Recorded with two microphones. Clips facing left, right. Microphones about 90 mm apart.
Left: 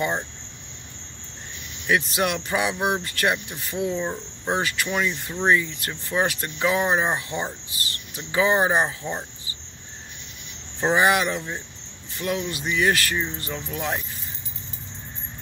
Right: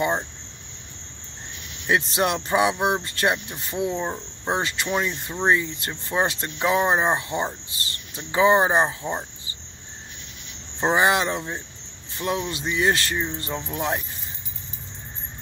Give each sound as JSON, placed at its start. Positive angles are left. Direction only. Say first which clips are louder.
{"t": 1.9, "sound": "speech", "louder": "right 1 dB", "side_deg": -30}
{"t": 10.8, "sound": "speech", "louder": "even", "side_deg": -25}